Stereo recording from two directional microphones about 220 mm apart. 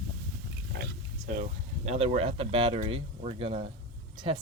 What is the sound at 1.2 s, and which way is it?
Speech, 30° right (ahead or behind).